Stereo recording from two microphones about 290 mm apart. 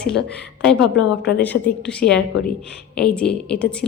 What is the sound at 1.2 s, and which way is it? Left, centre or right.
Speech, left.